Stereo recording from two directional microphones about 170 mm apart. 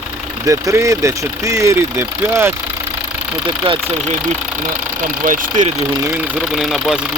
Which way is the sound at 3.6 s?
30° right (ahead or behind).